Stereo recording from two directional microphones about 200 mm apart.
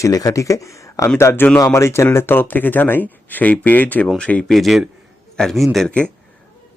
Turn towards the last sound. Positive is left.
turn(degrees=5)  # may be behind; listen again after turning